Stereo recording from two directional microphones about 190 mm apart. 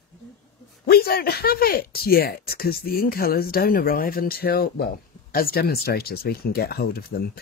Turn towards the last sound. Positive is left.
turn(degrees=55)  # may be behind; listen again after turning